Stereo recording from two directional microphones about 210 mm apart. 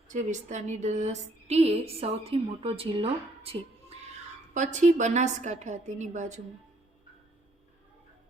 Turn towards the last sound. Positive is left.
turn(degrees=-35)  # may be behind; listen again after turning